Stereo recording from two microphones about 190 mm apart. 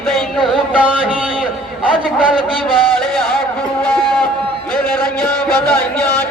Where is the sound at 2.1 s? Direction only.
5° right (ahead or behind).